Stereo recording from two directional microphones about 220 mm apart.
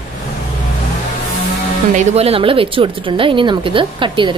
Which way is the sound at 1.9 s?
30° right (ahead or behind).